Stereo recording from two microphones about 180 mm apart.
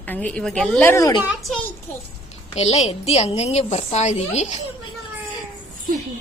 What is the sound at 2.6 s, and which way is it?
A woman's voice, 35° left (ahead or behind).